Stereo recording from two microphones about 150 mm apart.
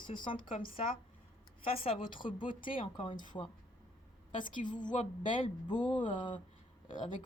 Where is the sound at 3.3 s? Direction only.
25° left (ahead or behind).